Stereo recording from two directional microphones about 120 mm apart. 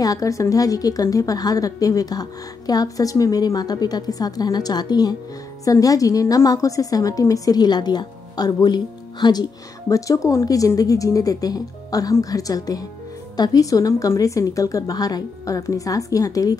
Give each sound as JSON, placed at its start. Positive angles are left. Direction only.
{"t": 0.0, "sound": "a woman's voice", "side_deg": 30}